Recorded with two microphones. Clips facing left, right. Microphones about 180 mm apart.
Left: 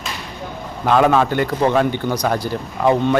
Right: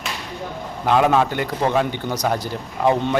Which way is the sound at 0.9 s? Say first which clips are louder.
Left 2 dB; 15° right (ahead or behind).